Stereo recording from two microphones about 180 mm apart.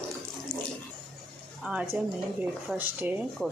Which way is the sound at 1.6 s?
5° right (ahead or behind).